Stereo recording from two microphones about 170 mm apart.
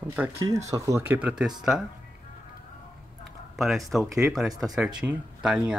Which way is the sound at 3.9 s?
Centre (ahead or behind).